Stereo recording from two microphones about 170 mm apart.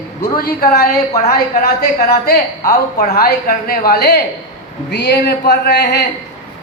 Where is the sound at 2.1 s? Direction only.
65° left (ahead or behind).